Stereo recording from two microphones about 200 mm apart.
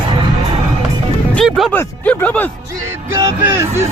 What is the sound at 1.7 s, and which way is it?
Speech, 5° left (ahead or behind).